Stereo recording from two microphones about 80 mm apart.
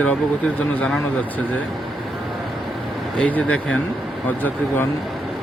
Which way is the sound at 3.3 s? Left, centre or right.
Centre.